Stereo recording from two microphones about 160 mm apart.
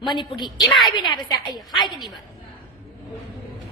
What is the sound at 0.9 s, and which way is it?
Speech, 30° left (ahead or behind).